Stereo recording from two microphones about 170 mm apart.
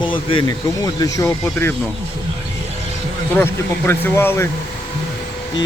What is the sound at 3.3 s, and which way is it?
Speech, 15° left (ahead or behind).